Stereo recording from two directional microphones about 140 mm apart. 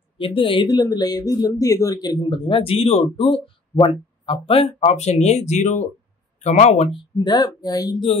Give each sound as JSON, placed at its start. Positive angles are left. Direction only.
{"t": 0.2, "sound": "speech", "side_deg": 40}